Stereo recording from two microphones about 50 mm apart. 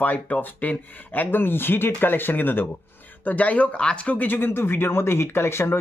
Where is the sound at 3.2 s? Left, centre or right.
Left.